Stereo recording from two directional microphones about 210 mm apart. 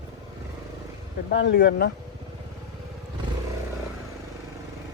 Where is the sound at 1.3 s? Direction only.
50° left (ahead or behind).